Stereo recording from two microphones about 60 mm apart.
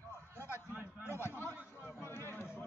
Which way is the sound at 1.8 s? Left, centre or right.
Left.